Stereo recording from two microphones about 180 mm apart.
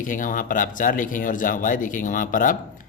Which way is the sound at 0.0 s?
45° left (ahead or behind).